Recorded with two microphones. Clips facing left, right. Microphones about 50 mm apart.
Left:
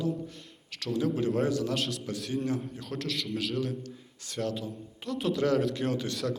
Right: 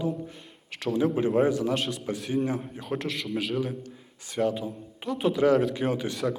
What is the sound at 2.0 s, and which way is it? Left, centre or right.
A man's voice, centre.